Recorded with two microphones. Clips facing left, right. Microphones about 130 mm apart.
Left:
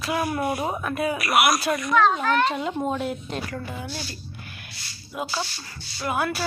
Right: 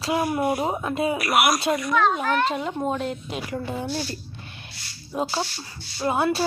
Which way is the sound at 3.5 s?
25° right (ahead or behind).